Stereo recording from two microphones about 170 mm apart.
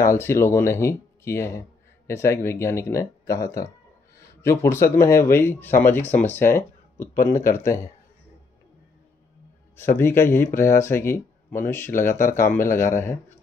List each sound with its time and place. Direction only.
0.0 s speech: 15° left (ahead or behind)
9.8 s speech: 15° left (ahead or behind)